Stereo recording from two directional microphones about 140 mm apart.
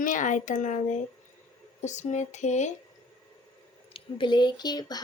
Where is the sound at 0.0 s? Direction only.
65° left (ahead or behind).